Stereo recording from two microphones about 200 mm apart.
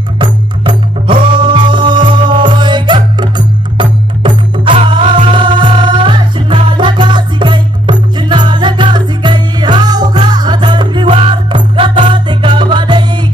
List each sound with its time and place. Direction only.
0.2 s music: 25° right (ahead or behind)